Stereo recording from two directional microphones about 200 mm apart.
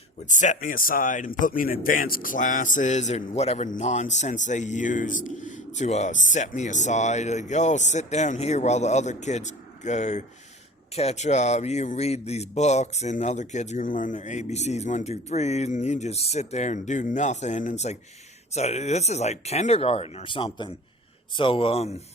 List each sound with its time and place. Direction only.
0.3 s speech: 40° left (ahead or behind)